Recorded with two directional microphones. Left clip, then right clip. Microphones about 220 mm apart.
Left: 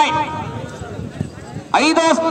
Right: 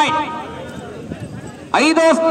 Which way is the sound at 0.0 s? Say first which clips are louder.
Even; 10° right (ahead or behind).